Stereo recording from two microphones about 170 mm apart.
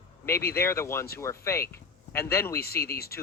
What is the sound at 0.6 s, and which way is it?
Speech, 15° left (ahead or behind).